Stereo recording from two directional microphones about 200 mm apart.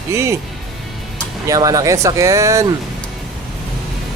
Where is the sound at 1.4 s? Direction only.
15° right (ahead or behind).